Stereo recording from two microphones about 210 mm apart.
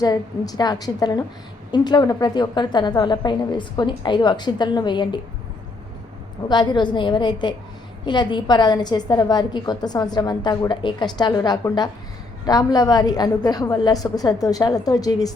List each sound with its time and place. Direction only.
0.0 s a woman's voice: 15° left (ahead or behind)
6.5 s a woman's voice: 20° left (ahead or behind)